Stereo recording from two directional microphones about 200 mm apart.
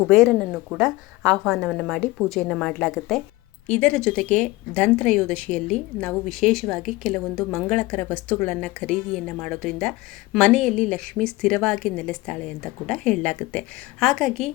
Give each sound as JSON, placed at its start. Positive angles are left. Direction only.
{"t": 0.1, "sound": "a woman's voice", "side_deg": 0}